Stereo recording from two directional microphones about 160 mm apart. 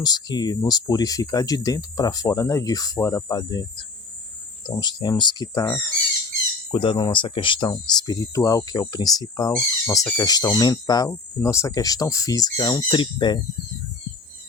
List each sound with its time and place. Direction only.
0.0 s speech: 25° left (ahead or behind)
6.7 s speech: 30° left (ahead or behind)